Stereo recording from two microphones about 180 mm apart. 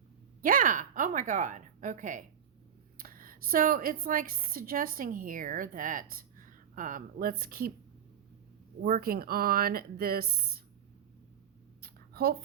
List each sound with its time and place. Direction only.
0.4 s a woman's voice: 50° right (ahead or behind)
8.8 s speech: 55° right (ahead or behind)
11.8 s a sound: 60° right (ahead or behind)